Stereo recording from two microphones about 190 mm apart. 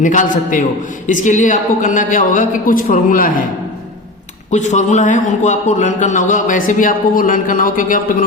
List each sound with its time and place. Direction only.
0.0 s a woman's voice: 45° left (ahead or behind)
4.5 s a man's voice: 40° left (ahead or behind)